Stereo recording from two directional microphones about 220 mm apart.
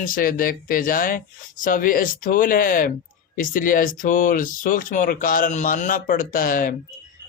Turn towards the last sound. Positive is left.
turn(degrees=40)  # may be behind; listen again after turning